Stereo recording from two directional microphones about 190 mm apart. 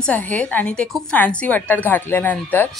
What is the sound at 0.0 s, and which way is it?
A woman's voice, 5° left (ahead or behind).